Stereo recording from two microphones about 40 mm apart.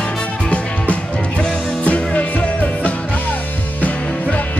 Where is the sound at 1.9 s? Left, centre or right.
Left.